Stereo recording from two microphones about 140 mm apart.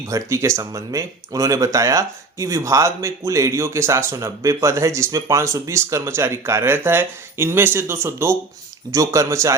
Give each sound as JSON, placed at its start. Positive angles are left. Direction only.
{"t": 0.1, "sound": "speech", "side_deg": -20}